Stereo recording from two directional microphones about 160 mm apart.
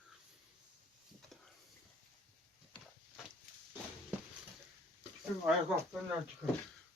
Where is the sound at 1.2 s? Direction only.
5° left (ahead or behind).